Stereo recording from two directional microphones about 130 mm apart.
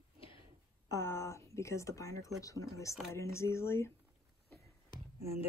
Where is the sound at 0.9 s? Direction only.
20° left (ahead or behind).